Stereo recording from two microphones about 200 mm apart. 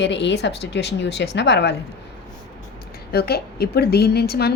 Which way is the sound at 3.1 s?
50° left (ahead or behind).